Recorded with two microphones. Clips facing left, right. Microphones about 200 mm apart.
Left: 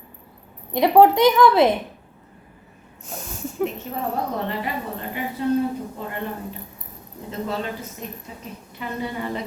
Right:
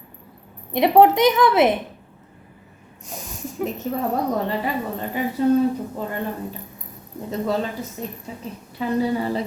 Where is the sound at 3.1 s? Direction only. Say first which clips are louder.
Left 1 dB; centre (ahead or behind).